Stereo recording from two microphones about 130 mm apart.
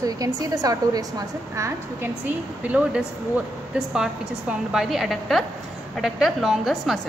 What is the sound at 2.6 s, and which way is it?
A woman's voice, 10° right (ahead or behind).